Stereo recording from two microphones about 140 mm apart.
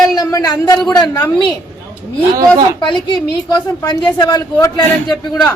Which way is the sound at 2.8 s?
35° left (ahead or behind).